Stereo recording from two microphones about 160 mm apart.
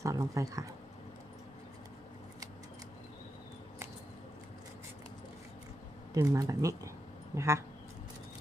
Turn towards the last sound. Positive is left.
turn(degrees=-15)  # may be behind; listen again after turning